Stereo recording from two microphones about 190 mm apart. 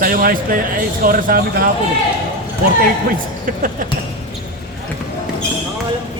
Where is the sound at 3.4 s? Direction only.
45° right (ahead or behind).